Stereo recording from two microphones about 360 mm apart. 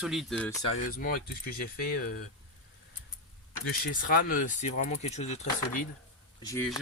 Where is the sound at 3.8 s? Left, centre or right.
Left.